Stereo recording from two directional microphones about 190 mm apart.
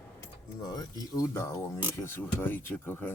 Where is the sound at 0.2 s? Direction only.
20° left (ahead or behind).